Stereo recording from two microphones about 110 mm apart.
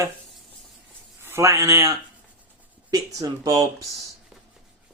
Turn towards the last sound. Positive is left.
turn(degrees=-35)  # may be behind; listen again after turning